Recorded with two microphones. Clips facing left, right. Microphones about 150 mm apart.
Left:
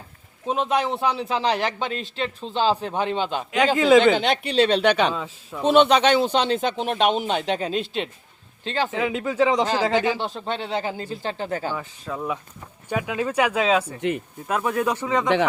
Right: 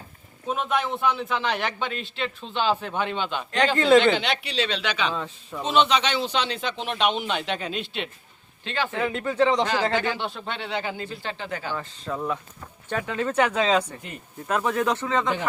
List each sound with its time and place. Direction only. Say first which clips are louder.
0.4 s a man's voice: left 3 dB; 30° left (ahead or behind)
3.8 s speech: left 2 dB; 10° left (ahead or behind)
4.1 s a man's voice: left 5 dB; 45° left (ahead or behind)
5.1 s speech: left 1 dB; 5° left (ahead or behind)
5.6 s a man's voice: left 6 dB; 55° left (ahead or behind); by 8.9 s 35° left (ahead or behind)
8.9 s speech: left 2 dB; 5° left (ahead or behind)
10.2 s a man's voice: left 4 dB; 40° left (ahead or behind)
11.7 s speech: even; 10° left (ahead or behind)